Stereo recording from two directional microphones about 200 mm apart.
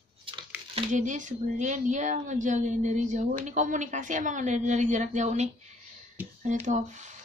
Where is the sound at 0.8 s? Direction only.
40° right (ahead or behind).